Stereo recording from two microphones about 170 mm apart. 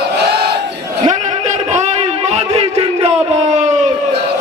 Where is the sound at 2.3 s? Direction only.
40° right (ahead or behind).